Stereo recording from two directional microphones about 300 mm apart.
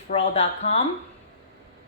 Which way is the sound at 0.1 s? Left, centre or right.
Centre.